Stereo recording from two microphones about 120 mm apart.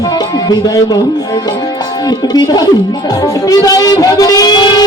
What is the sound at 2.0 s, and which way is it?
Music, 35° left (ahead or behind).